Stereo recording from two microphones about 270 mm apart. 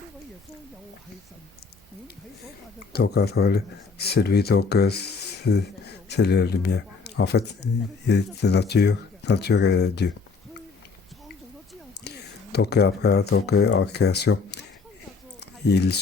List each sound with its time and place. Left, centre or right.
2.9 s speech: left
12.0 s speech: left
15.4 s a sound: left